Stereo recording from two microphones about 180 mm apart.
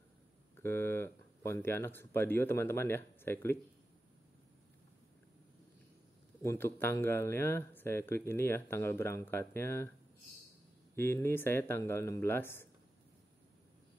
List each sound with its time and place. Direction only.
0.6 s speech: 10° left (ahead or behind)
6.4 s speech: 15° left (ahead or behind)
11.0 s speech: 10° left (ahead or behind)